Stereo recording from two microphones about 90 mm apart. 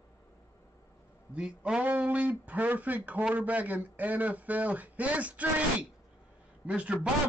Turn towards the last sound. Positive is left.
turn(degrees=-15)  # may be behind; listen again after turning